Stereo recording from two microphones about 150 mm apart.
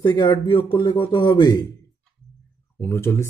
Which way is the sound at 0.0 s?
30° left (ahead or behind).